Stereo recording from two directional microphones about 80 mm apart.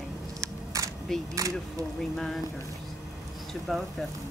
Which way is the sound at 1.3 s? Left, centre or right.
Right.